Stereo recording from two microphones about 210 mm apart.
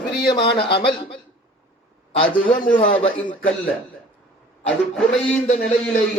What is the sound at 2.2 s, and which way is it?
Speech, 25° left (ahead or behind).